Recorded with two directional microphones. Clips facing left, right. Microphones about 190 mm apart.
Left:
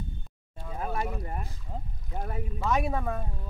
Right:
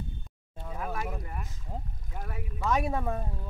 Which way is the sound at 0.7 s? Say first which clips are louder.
Left 3 dB; 30° left (ahead or behind).